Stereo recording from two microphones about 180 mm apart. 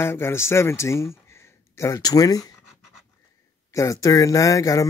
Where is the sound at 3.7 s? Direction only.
20° left (ahead or behind).